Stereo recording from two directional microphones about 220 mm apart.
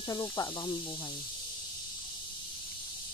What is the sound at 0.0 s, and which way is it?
Speech, 20° left (ahead or behind).